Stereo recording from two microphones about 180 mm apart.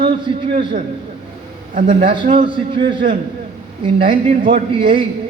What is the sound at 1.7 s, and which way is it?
A man's voice, 45° right (ahead or behind).